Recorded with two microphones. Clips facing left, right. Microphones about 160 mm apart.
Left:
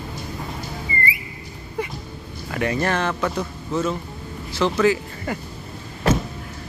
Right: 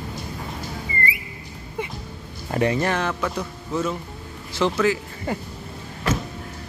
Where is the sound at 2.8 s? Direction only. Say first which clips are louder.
Left 1 dB; 15° right (ahead or behind).